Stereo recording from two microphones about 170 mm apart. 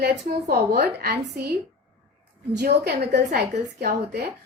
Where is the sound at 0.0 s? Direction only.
70° right (ahead or behind).